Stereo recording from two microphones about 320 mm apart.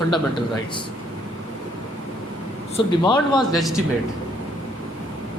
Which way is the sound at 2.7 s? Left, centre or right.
Centre.